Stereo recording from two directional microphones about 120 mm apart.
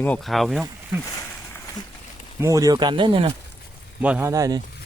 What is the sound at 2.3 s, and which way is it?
Speech, 30° right (ahead or behind).